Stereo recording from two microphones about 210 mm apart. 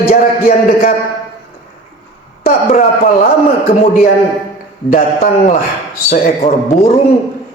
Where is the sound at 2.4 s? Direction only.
40° left (ahead or behind).